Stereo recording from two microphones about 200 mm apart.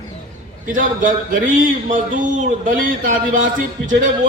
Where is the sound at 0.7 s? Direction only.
40° right (ahead or behind).